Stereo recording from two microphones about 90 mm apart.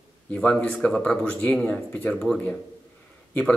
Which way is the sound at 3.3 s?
15° left (ahead or behind).